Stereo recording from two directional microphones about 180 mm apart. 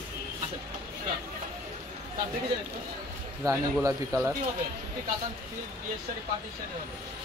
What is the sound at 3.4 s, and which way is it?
Speech, 20° right (ahead or behind).